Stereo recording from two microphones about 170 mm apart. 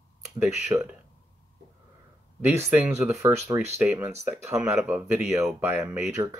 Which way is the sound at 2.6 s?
10° right (ahead or behind).